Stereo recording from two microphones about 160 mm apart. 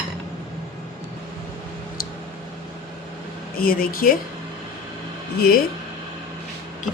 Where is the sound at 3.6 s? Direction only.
65° left (ahead or behind).